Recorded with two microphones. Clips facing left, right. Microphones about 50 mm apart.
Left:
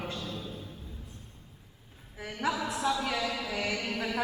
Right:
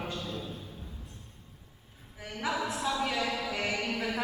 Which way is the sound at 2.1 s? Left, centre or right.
Left.